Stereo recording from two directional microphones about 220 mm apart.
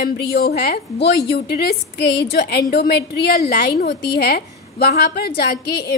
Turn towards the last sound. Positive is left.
turn(degrees=50)  # may be behind; listen again after turning